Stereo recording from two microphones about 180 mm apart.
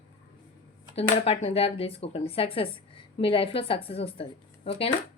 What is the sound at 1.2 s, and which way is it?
Speech, 35° left (ahead or behind).